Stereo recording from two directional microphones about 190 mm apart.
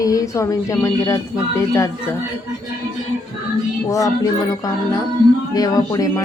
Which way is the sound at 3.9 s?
20° left (ahead or behind).